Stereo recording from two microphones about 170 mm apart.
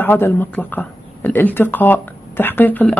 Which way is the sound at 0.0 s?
10° left (ahead or behind).